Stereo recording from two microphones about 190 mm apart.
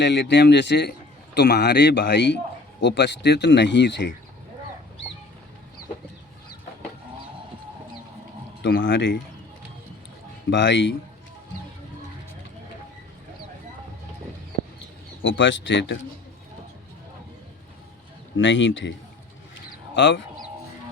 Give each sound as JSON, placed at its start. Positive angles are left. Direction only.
{"t": 0.0, "sound": "a man's voice", "side_deg": 65}
{"t": 8.6, "sound": "speech", "side_deg": 75}
{"t": 10.5, "sound": "speech", "side_deg": 75}
{"t": 15.2, "sound": "speech", "side_deg": 85}
{"t": 18.3, "sound": "a man's voice", "side_deg": 80}
{"t": 20.0, "sound": "speech", "side_deg": 70}